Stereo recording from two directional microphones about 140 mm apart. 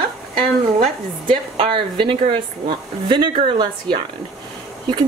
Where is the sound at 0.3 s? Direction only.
35° right (ahead or behind).